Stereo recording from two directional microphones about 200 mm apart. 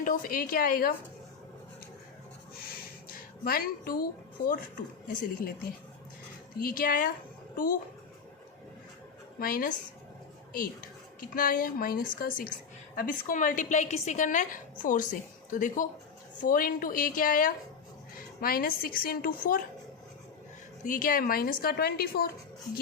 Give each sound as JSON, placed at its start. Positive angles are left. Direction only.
{"t": 0.0, "sound": "a woman's voice", "side_deg": 45}
{"t": 3.4, "sound": "a woman's voice", "side_deg": 45}
{"t": 6.6, "sound": "a woman's voice", "side_deg": 45}
{"t": 9.4, "sound": "a woman's voice", "side_deg": 45}
{"t": 20.8, "sound": "a woman's voice", "side_deg": 40}